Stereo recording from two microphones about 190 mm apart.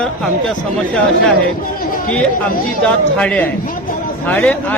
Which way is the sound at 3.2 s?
5° left (ahead or behind).